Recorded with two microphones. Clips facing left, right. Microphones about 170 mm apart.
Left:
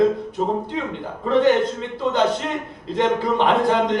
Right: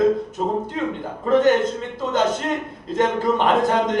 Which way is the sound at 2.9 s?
45° right (ahead or behind).